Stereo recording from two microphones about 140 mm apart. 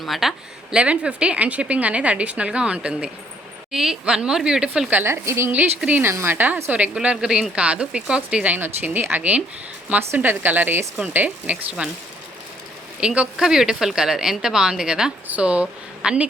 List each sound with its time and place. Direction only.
0.0 s a woman's voice: centre (ahead or behind)
13.0 s a woman's voice: 5° right (ahead or behind)